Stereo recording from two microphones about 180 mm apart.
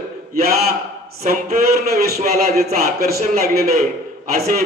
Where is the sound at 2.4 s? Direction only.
60° right (ahead or behind).